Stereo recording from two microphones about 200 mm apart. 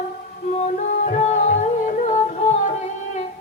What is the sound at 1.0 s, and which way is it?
Music, 35° left (ahead or behind).